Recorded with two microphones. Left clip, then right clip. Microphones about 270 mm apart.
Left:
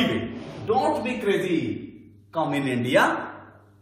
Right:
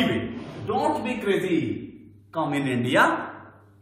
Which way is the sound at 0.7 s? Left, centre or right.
Centre.